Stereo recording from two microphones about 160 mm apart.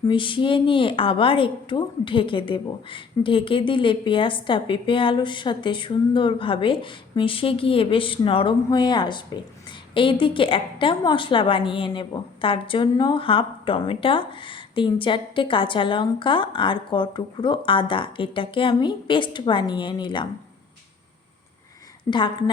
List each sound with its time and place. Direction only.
0.0 s a woman's voice: 30° left (ahead or behind)